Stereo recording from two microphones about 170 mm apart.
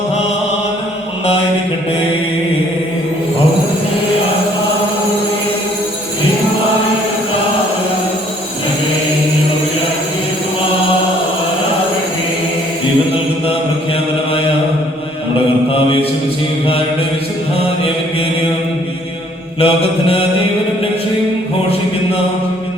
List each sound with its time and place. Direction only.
19.5 s mantra: 35° left (ahead or behind)